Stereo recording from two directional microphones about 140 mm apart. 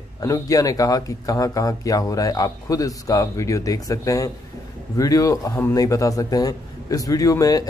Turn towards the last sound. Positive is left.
turn(degrees=25)  # may be behind; listen again after turning